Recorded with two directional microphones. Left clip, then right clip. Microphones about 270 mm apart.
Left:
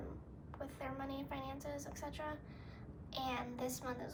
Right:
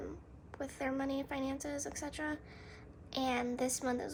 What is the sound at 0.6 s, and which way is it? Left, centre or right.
A woman's voice, right.